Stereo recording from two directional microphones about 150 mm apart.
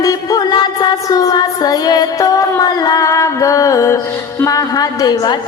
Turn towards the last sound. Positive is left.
turn(degrees=25)  # may be behind; listen again after turning